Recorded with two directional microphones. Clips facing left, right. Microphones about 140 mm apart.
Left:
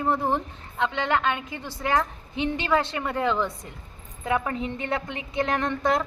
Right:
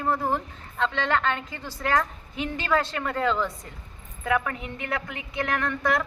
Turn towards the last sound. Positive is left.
turn(degrees=25)  # may be behind; listen again after turning